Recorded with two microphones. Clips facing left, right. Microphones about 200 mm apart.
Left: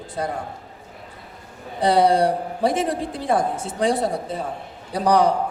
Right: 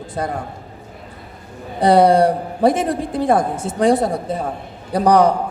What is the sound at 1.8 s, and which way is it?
A man's voice, 50° right (ahead or behind).